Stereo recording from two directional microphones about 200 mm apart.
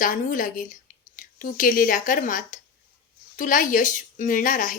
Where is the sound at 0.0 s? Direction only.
40° left (ahead or behind).